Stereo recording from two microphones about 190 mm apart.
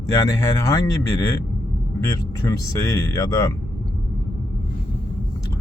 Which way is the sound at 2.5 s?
15° left (ahead or behind).